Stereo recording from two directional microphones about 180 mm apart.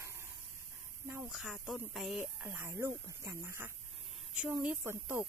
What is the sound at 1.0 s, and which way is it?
Speech, 15° right (ahead or behind).